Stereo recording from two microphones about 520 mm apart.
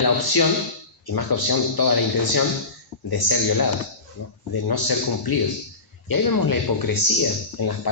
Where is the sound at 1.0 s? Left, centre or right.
Left.